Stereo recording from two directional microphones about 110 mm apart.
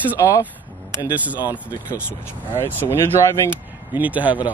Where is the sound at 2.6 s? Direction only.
20° left (ahead or behind).